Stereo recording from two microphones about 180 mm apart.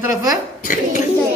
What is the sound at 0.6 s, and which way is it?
Speech, 45° left (ahead or behind).